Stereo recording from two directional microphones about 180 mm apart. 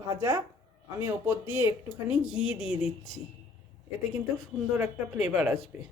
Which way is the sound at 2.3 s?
5° right (ahead or behind).